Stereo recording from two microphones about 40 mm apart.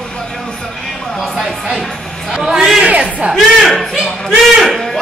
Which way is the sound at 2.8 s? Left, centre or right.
Right.